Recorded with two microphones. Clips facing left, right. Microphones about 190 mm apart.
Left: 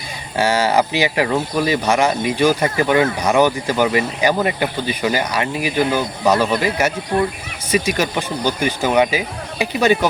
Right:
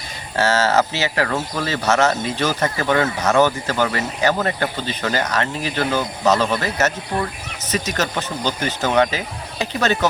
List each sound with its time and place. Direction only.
0.3 s speech: 15° left (ahead or behind)